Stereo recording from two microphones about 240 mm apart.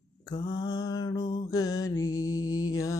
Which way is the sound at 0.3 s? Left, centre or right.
Centre.